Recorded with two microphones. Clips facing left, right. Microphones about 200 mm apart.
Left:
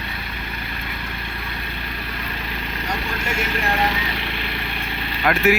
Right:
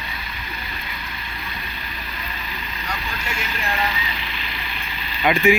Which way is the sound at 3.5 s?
60° left (ahead or behind).